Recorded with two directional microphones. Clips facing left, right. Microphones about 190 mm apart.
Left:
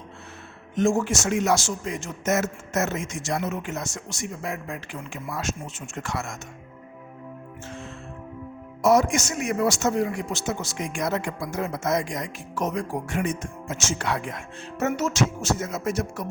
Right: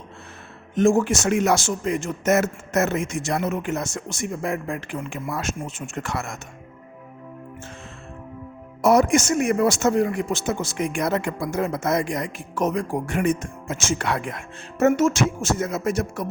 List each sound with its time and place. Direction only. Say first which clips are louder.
0.8 s speech: right 4 dB; 55° right (ahead or behind)
8.8 s speech: right 3 dB; 55° right (ahead or behind)